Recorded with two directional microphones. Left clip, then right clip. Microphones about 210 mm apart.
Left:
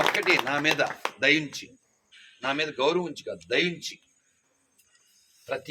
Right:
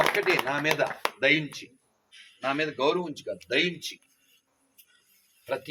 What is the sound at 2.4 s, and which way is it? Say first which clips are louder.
Speech: left 1 dB; 35° left (ahead or behind).